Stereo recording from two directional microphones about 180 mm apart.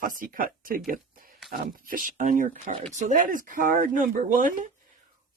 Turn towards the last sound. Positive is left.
turn(degrees=-50)  # may be behind; listen again after turning